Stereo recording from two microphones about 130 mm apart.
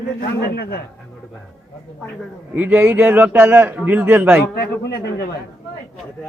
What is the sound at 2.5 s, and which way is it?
A man's voice, 15° right (ahead or behind).